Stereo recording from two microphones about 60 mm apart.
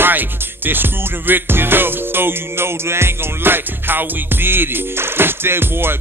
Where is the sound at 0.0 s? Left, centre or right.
Right.